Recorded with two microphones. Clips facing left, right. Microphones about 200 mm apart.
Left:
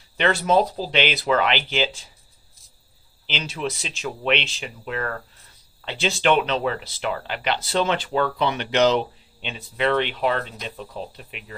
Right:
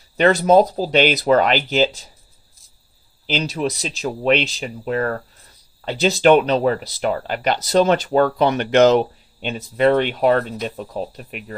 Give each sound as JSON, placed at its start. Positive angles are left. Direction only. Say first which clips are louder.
{"t": 0.2, "sound": "speech", "louder": "right 6 dB", "side_deg": -40}
{"t": 3.3, "sound": "speech", "louder": "right 6 dB", "side_deg": -40}